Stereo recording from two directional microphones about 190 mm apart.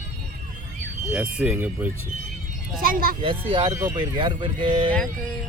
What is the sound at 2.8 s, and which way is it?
Speech, 50° right (ahead or behind).